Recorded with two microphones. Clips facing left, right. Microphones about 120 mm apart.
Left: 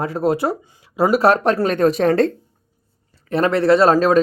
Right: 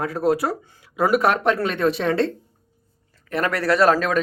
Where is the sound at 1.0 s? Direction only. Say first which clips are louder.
Left 4 dB; 30° left (ahead or behind).